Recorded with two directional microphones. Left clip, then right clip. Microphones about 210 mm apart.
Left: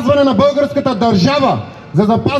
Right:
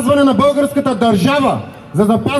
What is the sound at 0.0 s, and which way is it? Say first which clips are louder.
A man's voice: left 1 dB; 40° left (ahead or behind).